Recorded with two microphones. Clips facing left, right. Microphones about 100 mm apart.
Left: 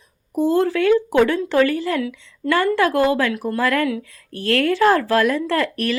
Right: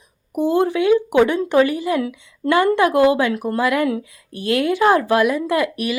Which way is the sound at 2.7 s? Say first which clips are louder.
Right 3 dB; 20° right (ahead or behind).